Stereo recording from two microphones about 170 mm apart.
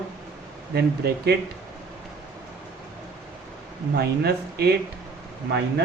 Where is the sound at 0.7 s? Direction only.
70° right (ahead or behind).